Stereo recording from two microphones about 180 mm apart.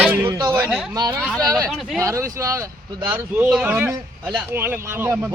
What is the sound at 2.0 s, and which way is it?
Speech, 15° right (ahead or behind).